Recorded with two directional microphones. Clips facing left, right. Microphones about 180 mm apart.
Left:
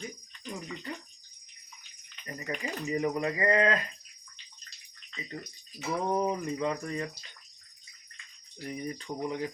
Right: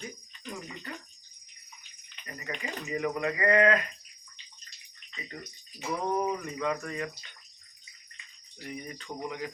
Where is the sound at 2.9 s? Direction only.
25° left (ahead or behind).